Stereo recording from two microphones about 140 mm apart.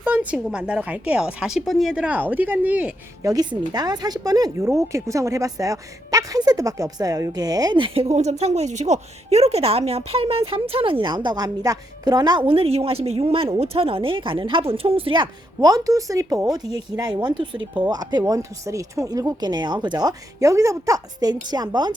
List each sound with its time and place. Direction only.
0.0 s a sound: 15° right (ahead or behind)
0.3 s speech: 5° right (ahead or behind)
3.2 s a woman's voice: 30° right (ahead or behind)
12.5 s speech: 45° right (ahead or behind)